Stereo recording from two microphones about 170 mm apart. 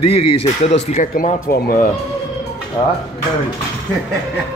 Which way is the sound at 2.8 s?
20° left (ahead or behind).